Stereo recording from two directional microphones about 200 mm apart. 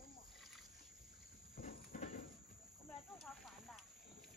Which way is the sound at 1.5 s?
45° left (ahead or behind).